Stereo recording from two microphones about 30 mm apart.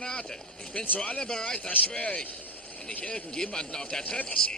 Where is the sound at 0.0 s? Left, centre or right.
Left.